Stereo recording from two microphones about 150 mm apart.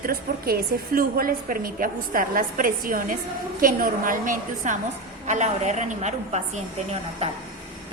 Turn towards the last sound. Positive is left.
turn(degrees=-45)  # may be behind; listen again after turning